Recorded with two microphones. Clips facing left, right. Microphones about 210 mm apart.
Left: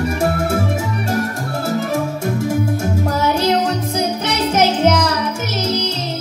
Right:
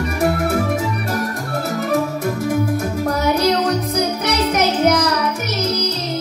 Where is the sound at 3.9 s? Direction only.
25° left (ahead or behind).